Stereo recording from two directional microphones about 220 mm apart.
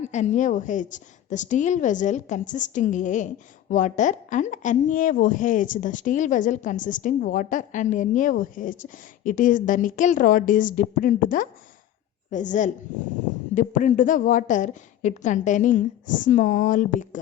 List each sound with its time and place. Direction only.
0.1 s a woman's voice: 35° left (ahead or behind)